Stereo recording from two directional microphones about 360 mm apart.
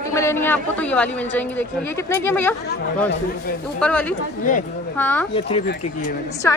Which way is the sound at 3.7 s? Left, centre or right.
Centre.